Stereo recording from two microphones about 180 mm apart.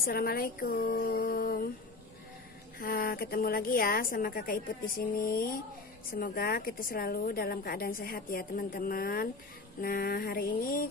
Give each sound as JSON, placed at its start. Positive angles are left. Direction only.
{"t": 0.0, "sound": "a woman's voice", "side_deg": 55}
{"t": 2.8, "sound": "a woman's voice", "side_deg": 55}